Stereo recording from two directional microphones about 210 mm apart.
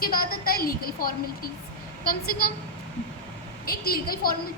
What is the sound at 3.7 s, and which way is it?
Speech, 45° left (ahead or behind).